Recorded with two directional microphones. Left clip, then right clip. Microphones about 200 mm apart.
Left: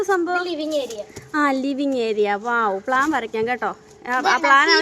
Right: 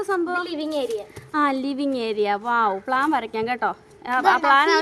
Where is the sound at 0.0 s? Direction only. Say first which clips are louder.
Left 3 dB; 10° left (ahead or behind).